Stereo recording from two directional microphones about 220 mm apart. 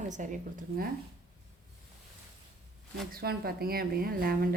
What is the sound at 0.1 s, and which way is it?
Speech, 35° right (ahead or behind).